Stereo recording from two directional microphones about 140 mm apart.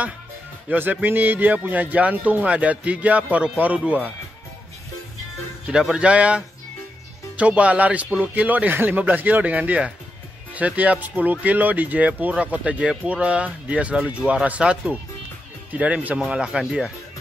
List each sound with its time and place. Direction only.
0.7 s speech: 15° right (ahead or behind)
5.7 s speech: 5° right (ahead or behind)